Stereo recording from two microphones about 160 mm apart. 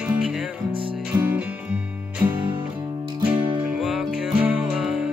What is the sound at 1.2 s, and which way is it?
Music, 5° right (ahead or behind).